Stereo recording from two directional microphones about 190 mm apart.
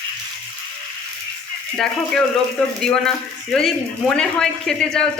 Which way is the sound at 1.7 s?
5° left (ahead or behind).